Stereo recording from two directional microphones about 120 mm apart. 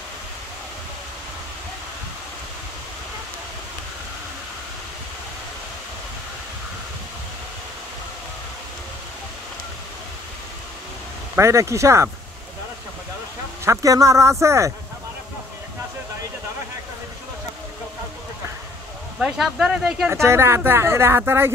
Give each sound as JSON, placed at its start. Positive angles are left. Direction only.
{"t": 11.3, "sound": "a woman's voice", "side_deg": -25}
{"t": 13.7, "sound": "a woman's voice", "side_deg": -25}
{"t": 19.1, "sound": "speech", "side_deg": -5}
{"t": 20.1, "sound": "a woman's voice", "side_deg": -20}